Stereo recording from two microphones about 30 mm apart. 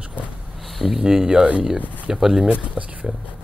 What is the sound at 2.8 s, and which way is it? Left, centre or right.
Speech, right.